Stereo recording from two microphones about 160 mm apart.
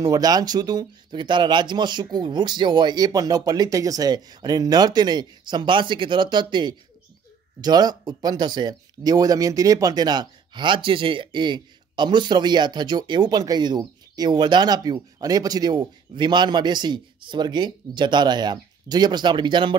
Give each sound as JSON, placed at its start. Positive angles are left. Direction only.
{"t": 0.0, "sound": "speech", "side_deg": -25}